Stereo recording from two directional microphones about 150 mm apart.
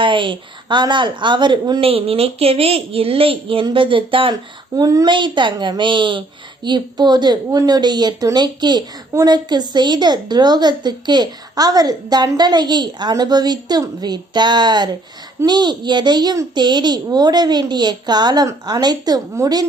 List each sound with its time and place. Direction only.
0.0 s speech: 35° right (ahead or behind)